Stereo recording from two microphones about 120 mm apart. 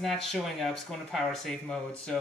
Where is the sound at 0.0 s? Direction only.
Centre (ahead or behind).